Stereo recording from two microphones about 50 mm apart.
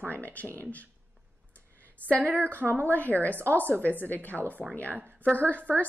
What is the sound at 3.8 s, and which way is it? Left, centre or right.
A woman's voice, left.